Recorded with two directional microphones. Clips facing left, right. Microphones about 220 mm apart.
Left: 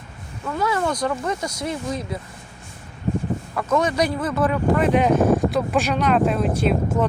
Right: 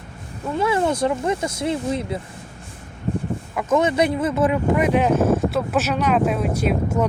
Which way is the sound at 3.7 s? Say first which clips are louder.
Right 2 dB; 25° right (ahead or behind).